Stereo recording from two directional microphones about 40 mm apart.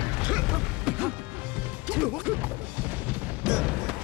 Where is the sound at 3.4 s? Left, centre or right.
Centre.